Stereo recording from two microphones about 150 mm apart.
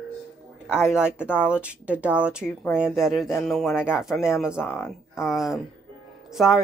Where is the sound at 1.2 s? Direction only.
10° left (ahead or behind).